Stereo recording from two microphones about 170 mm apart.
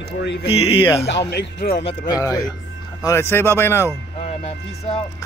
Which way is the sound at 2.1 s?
20° left (ahead or behind).